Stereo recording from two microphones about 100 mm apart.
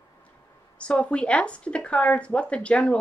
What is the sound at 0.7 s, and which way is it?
Speech, 10° left (ahead or behind).